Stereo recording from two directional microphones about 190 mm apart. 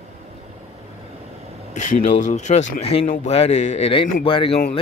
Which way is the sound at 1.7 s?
40° left (ahead or behind).